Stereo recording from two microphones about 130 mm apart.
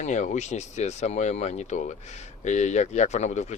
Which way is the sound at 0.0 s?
65° left (ahead or behind).